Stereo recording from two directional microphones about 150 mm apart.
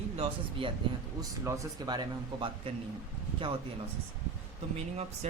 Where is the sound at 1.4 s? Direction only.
20° right (ahead or behind).